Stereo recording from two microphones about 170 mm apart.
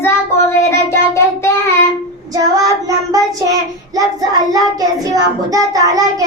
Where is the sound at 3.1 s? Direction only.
20° right (ahead or behind).